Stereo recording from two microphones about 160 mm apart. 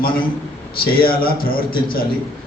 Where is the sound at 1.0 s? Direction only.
65° left (ahead or behind).